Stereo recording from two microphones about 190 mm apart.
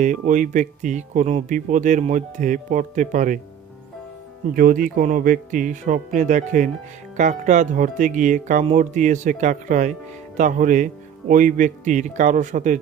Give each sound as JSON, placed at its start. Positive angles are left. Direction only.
{"t": 0.0, "sound": "speech", "side_deg": -45}
{"t": 4.5, "sound": "speech", "side_deg": -45}